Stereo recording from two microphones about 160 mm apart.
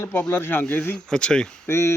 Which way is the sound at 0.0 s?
10° left (ahead or behind).